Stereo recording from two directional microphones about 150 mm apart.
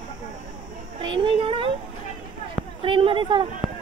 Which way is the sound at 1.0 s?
35° right (ahead or behind).